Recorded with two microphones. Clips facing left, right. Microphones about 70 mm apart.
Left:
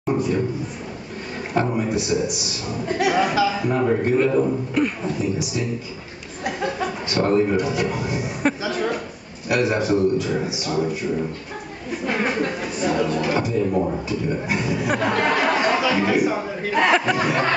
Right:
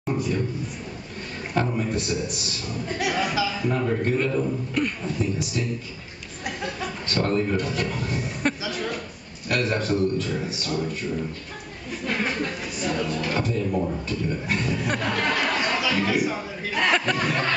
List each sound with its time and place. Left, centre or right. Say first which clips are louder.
1.6 s a man's voice: left 3 dB; centre
6.4 s chuckle: left 6 dB; centre
7.3 s a man's voice: left 5 dB; centre
13.7 s a man's voice: left 4 dB; left
14.0 s speech: left 3 dB; centre